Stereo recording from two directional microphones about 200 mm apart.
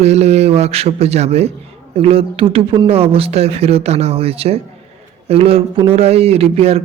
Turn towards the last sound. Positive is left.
turn(degrees=-30)  # may be behind; listen again after turning